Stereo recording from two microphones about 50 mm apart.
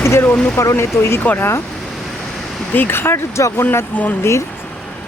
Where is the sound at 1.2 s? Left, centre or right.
Left.